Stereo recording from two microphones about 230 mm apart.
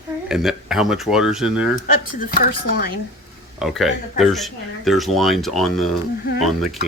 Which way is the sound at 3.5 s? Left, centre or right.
Centre.